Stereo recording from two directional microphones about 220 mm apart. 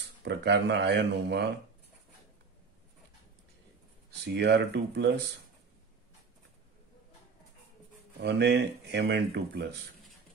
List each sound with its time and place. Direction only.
0.2 s speech: 50° right (ahead or behind)
4.4 s speech: 50° right (ahead or behind)
8.2 s speech: 50° right (ahead or behind)